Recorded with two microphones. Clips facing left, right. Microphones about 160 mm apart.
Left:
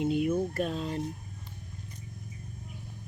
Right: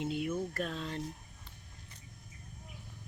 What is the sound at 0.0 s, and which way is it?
Speech, 15° left (ahead or behind).